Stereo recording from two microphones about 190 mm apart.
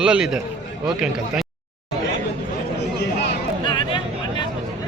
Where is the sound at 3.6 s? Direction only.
25° left (ahead or behind).